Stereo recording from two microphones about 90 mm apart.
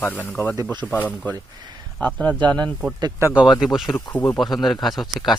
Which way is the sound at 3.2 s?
30° right (ahead or behind).